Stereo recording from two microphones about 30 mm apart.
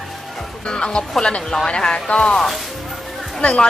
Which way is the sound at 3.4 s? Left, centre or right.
Left.